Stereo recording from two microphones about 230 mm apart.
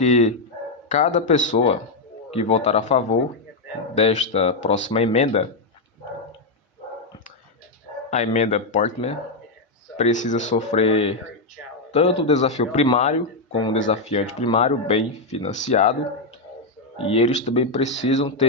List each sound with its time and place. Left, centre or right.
0.0 s speech: left
8.1 s speech: left
17.0 s speech: left